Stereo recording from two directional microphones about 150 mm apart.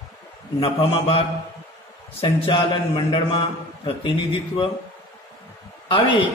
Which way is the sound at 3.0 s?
30° left (ahead or behind).